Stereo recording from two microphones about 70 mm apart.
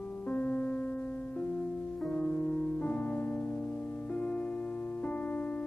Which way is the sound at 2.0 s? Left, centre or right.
Centre.